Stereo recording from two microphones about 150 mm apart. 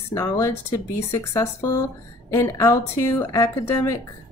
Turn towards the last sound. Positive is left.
turn(degrees=20)  # may be behind; listen again after turning